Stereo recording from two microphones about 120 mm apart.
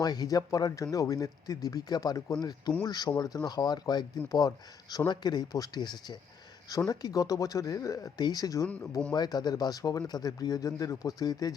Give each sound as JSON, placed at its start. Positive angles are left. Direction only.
{"t": 0.0, "sound": "speech", "side_deg": 35}
{"t": 8.6, "sound": "speech", "side_deg": 15}
{"t": 9.1, "sound": "speech", "side_deg": 35}